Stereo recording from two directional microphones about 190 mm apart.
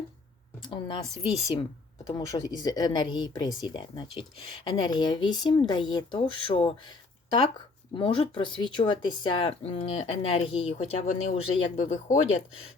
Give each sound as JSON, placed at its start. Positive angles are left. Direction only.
{"t": 0.6, "sound": "speech", "side_deg": 25}
{"t": 7.9, "sound": "speech", "side_deg": 25}